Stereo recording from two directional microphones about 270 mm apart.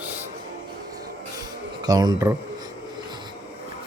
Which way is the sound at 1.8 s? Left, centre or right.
Centre.